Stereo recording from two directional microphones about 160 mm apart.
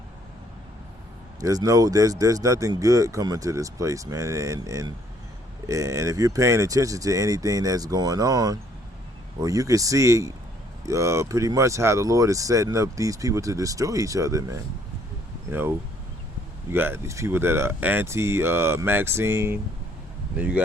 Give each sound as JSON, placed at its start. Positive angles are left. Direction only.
{"t": 1.4, "sound": "speech", "side_deg": -20}
{"t": 16.7, "sound": "speech", "side_deg": -15}